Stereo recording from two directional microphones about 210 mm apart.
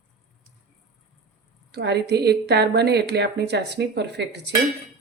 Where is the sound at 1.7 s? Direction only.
50° right (ahead or behind).